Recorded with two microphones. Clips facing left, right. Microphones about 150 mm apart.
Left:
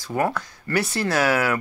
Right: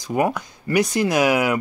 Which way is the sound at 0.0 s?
15° right (ahead or behind).